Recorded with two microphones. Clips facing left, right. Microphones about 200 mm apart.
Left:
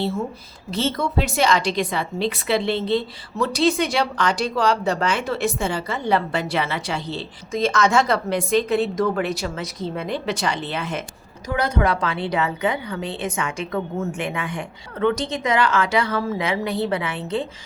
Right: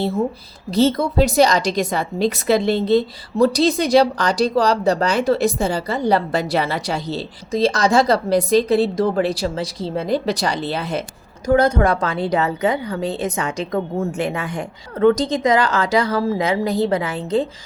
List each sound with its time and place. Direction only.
0.0 s a woman's voice: 40° right (ahead or behind)